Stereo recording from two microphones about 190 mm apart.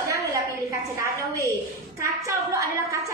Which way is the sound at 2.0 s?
15° right (ahead or behind).